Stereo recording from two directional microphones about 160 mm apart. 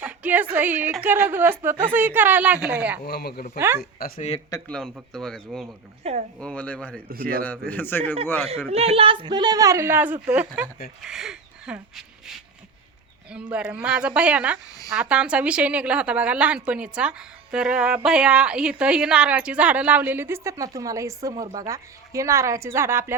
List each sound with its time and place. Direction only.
0.0 s a sound: 10° right (ahead or behind)
0.5 s a woman's voice: 10° right (ahead or behind)
3.1 s speech: 75° left (ahead or behind)
4.5 s a man's voice: 25° left (ahead or behind)
5.1 s speech: 5° left (ahead or behind)
6.0 s speech: 40° right (ahead or behind)
6.4 s a man's voice: 5° left (ahead or behind)
7.1 s a man's voice: 65° right (ahead or behind)
7.4 s a man's voice: 10° left (ahead or behind)
8.4 s speech: 40° right (ahead or behind); by 12.3 s 5° right (ahead or behind)
13.3 s a woman's voice: 5° right (ahead or behind)